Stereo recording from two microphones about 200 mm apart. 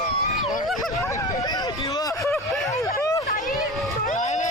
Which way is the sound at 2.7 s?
15° left (ahead or behind).